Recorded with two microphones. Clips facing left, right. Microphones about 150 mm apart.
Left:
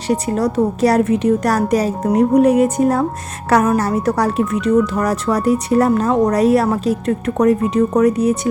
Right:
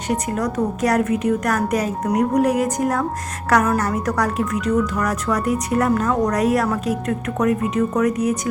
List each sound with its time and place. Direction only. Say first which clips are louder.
0.1 s a woman's voice: left 5 dB; 30° left (ahead or behind)